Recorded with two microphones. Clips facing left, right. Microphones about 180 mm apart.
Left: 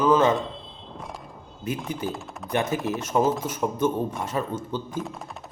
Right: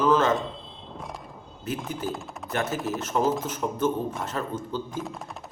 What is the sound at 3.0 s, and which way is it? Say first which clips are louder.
Speech: left 4 dB; 10° left (ahead or behind).